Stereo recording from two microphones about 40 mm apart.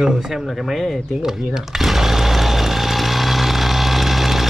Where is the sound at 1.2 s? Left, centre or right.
Centre.